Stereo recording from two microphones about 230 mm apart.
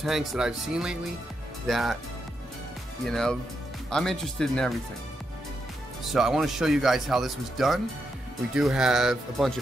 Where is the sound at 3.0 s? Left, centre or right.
Centre.